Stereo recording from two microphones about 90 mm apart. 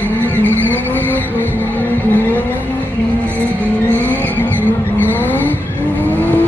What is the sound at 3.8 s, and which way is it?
Vehicle, 25° right (ahead or behind).